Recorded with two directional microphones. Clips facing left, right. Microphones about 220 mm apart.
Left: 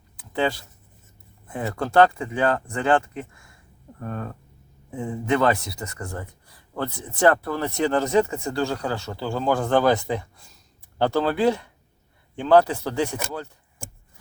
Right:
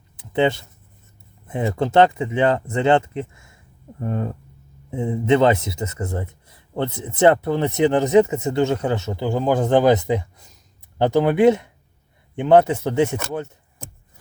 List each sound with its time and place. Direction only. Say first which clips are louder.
0.2 s speech: right 5 dB; 25° right (ahead or behind)